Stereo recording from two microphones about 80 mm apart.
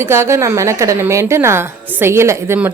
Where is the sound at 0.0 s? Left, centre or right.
Right.